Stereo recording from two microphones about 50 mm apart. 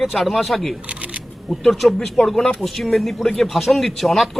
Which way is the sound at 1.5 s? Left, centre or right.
Centre.